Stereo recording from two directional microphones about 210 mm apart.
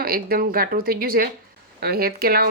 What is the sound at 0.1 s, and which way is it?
Speech, 45° right (ahead or behind).